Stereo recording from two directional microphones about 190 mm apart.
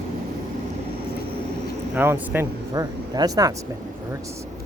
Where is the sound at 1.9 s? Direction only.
10° right (ahead or behind).